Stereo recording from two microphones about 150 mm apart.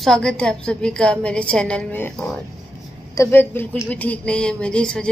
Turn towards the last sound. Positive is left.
turn(degrees=5)  # may be behind; listen again after turning